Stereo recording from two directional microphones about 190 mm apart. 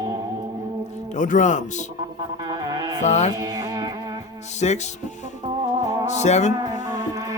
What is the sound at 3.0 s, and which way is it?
Speech, 35° left (ahead or behind).